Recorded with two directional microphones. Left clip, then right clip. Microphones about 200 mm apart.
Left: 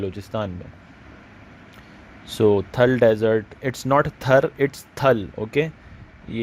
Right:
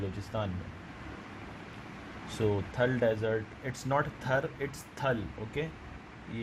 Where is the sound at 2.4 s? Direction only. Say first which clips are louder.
Left 13 dB; 45° left (ahead or behind).